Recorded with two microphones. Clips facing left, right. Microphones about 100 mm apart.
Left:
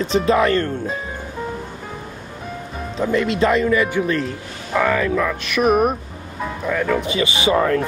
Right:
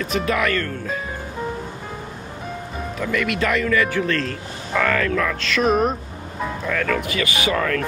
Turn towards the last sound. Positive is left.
turn(degrees=25)  # may be behind; listen again after turning